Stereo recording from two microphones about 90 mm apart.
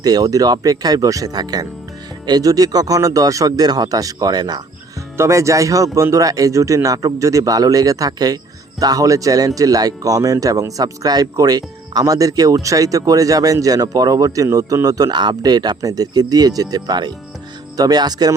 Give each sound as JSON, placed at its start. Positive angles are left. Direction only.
{"t": 0.0, "sound": "speech", "side_deg": -45}
{"t": 5.1, "sound": "speech", "side_deg": -30}